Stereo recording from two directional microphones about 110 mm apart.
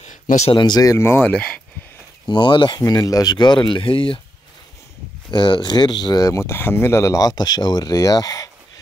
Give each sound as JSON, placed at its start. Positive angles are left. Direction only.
{"t": 0.5, "sound": "speech", "side_deg": 40}
{"t": 1.3, "sound": "speech", "side_deg": 10}
{"t": 2.2, "sound": "speech", "side_deg": 45}
{"t": 2.8, "sound": "speech", "side_deg": 35}
{"t": 5.3, "sound": "speech", "side_deg": 45}